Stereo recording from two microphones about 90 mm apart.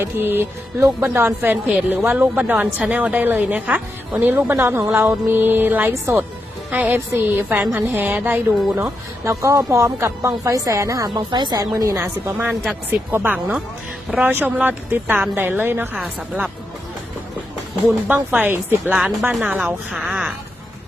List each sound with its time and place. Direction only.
0.0 s a woman's voice: 25° right (ahead or behind)
6.7 s a woman's voice: 15° right (ahead or behind)
8.8 s speech: 35° right (ahead or behind)
11.3 s speech: 55° right (ahead or behind)
11.5 s speech: 40° right (ahead or behind)
11.9 s a woman's voice: 25° right (ahead or behind)
18.1 s a woman's voice: 20° right (ahead or behind)
19.6 s speech: 5° right (ahead or behind)